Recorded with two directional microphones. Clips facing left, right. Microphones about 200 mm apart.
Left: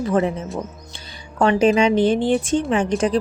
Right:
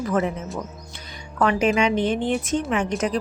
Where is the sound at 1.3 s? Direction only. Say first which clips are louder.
Left 4 dB; 30° left (ahead or behind).